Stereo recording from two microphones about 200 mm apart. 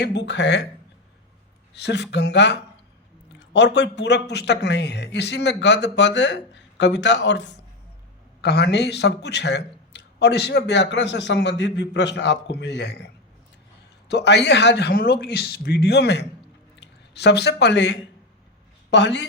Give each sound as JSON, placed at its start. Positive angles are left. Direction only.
{"t": 0.0, "sound": "a man's voice", "side_deg": 60}
{"t": 1.7, "sound": "a man's voice", "side_deg": 60}
{"t": 14.1, "sound": "a man's voice", "side_deg": 60}